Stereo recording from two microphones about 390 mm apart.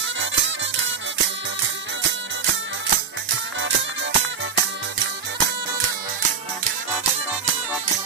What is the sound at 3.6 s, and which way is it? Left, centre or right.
Music, right.